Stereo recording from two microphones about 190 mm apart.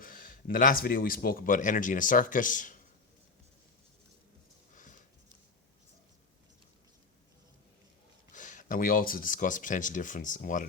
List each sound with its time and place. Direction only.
0.0 s speech: 45° left (ahead or behind)
4.7 s a sound: 45° left (ahead or behind)
8.3 s speech: 40° left (ahead or behind)